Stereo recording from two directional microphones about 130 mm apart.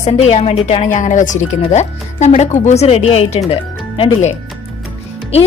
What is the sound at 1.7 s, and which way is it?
A woman's voice, 60° left (ahead or behind).